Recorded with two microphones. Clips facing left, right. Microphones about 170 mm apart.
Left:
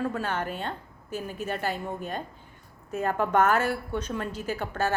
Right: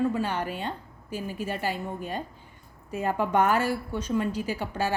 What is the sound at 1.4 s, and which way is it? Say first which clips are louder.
Speech: left 1 dB; 10° right (ahead or behind).